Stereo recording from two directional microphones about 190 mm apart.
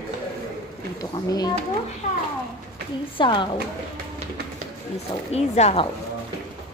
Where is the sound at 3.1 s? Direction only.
25° left (ahead or behind).